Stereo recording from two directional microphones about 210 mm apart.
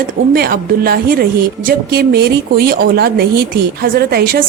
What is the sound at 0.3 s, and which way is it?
A woman's voice, 45° right (ahead or behind).